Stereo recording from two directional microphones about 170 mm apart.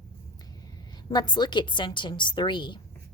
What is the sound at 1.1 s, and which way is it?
A woman's voice, 25° left (ahead or behind).